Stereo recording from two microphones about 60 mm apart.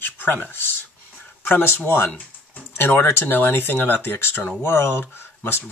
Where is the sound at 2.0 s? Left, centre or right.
Left.